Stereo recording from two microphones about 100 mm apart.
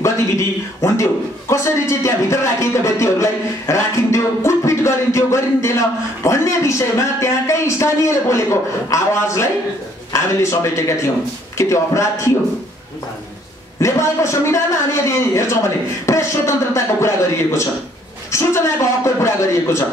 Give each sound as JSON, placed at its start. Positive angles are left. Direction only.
{"t": 0.0, "sound": "a sound", "side_deg": 30}
{"t": 1.5, "sound": "speech", "side_deg": 30}
{"t": 13.7, "sound": "speech", "side_deg": 30}
{"t": 18.3, "sound": "speech", "side_deg": 30}